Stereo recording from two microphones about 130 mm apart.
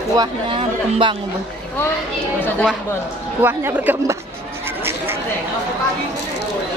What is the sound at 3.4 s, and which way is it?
Speech, 15° right (ahead or behind).